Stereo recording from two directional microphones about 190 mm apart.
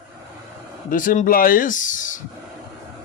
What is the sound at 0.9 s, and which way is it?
A man's voice, 45° left (ahead or behind).